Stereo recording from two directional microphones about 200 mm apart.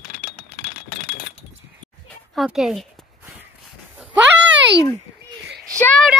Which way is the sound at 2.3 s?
Centre (ahead or behind).